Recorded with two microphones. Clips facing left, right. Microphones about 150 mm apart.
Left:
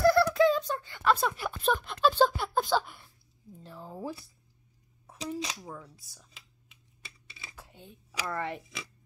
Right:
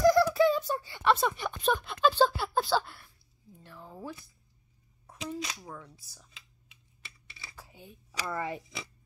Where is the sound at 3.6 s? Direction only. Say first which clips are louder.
Left 4 dB; 25° left (ahead or behind).